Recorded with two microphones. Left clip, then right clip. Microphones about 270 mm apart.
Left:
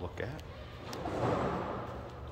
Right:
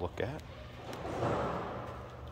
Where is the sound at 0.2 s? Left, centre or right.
Centre.